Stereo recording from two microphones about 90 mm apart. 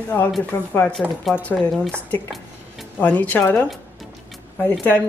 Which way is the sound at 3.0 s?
20° left (ahead or behind).